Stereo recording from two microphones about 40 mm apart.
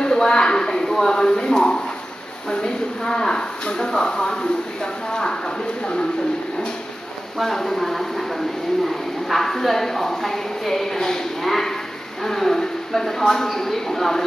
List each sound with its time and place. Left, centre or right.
0.0 s a sound: centre
0.9 s speech: centre
7.3 s speech: centre